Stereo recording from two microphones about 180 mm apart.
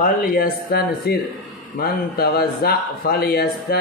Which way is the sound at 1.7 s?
60° left (ahead or behind).